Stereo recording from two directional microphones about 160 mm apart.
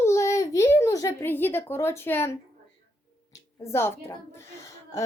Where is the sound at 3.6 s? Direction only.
15° left (ahead or behind).